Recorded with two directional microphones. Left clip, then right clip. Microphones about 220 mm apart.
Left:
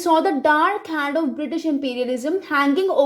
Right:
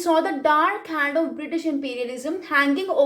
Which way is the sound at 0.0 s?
30° left (ahead or behind).